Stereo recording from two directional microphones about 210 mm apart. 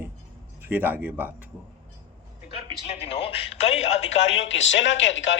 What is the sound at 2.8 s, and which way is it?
Speech, 30° left (ahead or behind).